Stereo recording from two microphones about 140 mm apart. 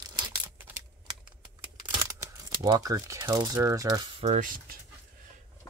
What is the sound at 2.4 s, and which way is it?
Speech, 30° right (ahead or behind).